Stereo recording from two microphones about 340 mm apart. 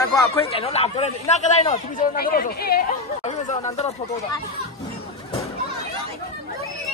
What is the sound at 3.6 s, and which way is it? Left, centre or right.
Speech, centre.